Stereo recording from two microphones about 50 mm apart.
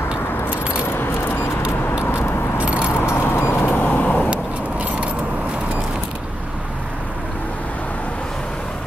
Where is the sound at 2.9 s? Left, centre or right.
Left.